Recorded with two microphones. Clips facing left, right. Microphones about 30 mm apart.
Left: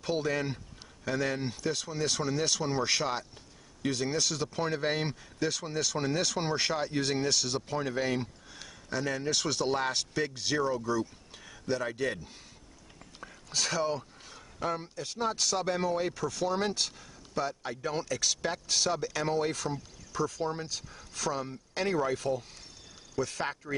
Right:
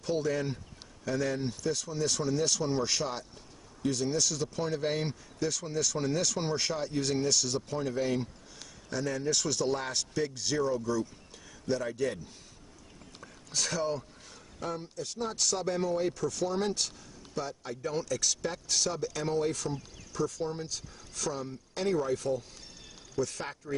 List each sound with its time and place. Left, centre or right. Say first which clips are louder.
0.0 s speech: even; left
13.2 s whispering: left 2 dB; centre
13.8 s speech: left 1 dB; left